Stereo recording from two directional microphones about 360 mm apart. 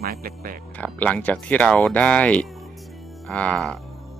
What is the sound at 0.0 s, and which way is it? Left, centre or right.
Speech, right.